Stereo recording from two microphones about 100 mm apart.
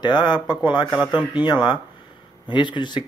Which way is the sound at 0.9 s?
10° right (ahead or behind).